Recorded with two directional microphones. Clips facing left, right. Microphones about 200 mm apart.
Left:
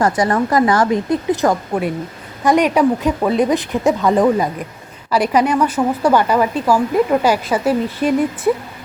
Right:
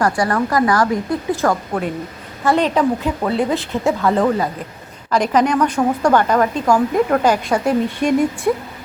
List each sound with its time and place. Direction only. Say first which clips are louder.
0.0 s a woman's voice: left 2 dB; 20° left (ahead or behind); by 8.5 s 5° left (ahead or behind)